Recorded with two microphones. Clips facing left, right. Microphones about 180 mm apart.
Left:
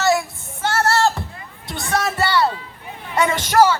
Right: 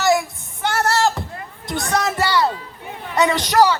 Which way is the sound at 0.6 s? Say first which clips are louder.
Left 1 dB; 20° right (ahead or behind).